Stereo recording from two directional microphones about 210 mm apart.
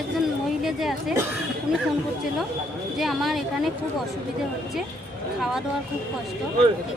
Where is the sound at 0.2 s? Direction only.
Centre (ahead or behind).